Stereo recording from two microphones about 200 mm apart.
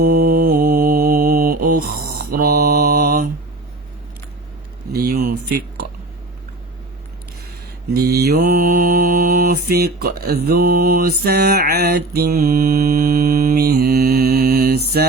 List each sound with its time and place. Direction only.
0.0 s mantra: 50° right (ahead or behind)
4.9 s a sound: 45° right (ahead or behind)
7.9 s mantra: 55° right (ahead or behind)
14.9 s music: 50° right (ahead or behind)